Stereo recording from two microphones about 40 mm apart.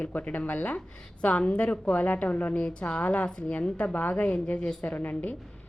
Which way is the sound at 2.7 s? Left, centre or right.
Left.